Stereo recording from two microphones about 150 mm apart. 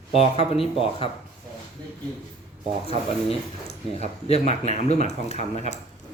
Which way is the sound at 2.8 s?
45° left (ahead or behind).